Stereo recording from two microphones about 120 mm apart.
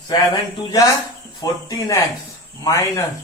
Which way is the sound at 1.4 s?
30° left (ahead or behind).